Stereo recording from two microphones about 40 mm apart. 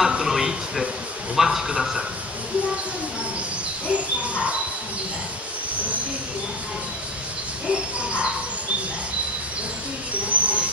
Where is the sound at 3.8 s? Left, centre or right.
Right.